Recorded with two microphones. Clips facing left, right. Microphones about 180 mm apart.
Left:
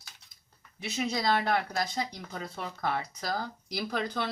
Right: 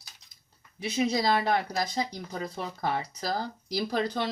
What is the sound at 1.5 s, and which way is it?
Speech, 35° right (ahead or behind).